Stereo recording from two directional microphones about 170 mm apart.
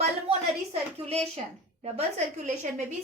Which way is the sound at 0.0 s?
40° right (ahead or behind).